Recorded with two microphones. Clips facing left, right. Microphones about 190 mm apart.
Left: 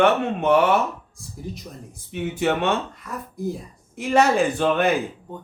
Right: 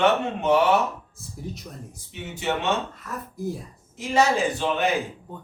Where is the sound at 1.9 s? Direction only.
55° left (ahead or behind).